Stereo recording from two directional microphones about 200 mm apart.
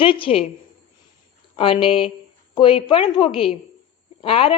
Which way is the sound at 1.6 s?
25° left (ahead or behind).